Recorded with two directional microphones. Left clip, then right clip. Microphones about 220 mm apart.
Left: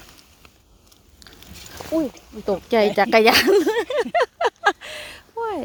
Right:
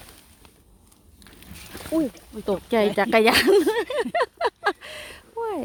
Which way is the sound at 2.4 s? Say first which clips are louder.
Left 3 dB; centre (ahead or behind).